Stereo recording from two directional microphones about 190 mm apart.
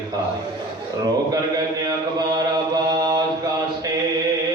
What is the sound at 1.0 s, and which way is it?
Mantra, 20° right (ahead or behind).